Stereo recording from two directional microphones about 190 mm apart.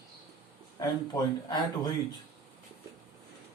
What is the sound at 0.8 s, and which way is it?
Speech, 20° left (ahead or behind).